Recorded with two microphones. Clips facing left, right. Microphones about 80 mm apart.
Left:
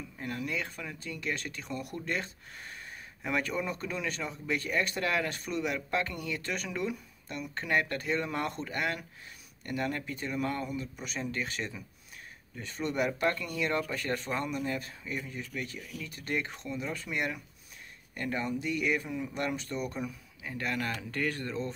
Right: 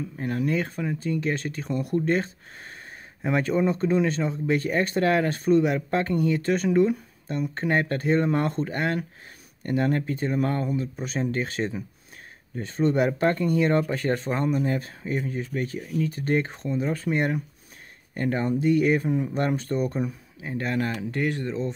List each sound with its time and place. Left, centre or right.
0.2 s speech: right